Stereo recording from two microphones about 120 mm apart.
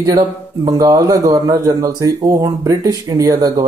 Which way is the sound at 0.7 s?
30° right (ahead or behind).